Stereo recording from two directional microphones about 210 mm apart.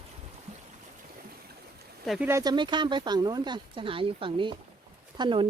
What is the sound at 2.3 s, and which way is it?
Speech, 15° right (ahead or behind).